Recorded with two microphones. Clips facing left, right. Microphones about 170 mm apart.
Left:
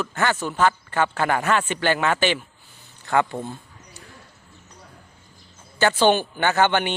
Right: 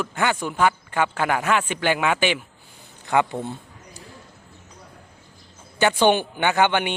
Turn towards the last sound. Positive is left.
turn(degrees=-10)  # may be behind; listen again after turning